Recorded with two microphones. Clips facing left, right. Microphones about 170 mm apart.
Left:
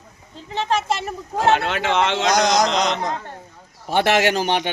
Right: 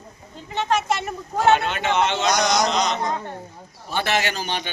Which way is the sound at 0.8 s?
30° left (ahead or behind).